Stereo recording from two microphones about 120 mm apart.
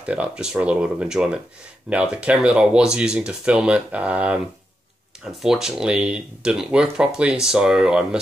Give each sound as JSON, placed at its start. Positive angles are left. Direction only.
{"t": 0.0, "sound": "speech", "side_deg": -10}